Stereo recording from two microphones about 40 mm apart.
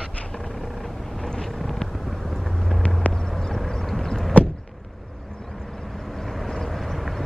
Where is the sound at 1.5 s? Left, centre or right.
Centre.